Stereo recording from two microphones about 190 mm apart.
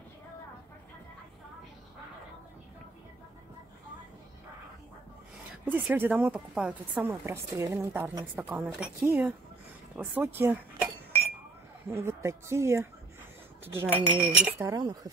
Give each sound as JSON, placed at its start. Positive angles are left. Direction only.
{"t": 5.7, "sound": "speech", "side_deg": -10}
{"t": 8.4, "sound": "speech", "side_deg": 0}
{"t": 11.9, "sound": "speech", "side_deg": -15}
{"t": 14.7, "sound": "speech", "side_deg": -20}